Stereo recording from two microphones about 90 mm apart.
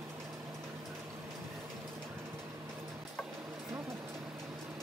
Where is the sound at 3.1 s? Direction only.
Centre (ahead or behind).